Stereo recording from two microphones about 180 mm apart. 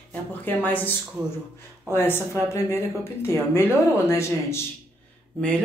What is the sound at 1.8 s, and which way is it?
Speech, 10° left (ahead or behind).